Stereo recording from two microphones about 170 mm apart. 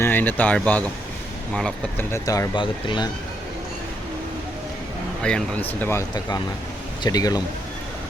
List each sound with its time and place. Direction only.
0.0 s speech: 10° left (ahead or behind)
5.2 s speech: 10° left (ahead or behind)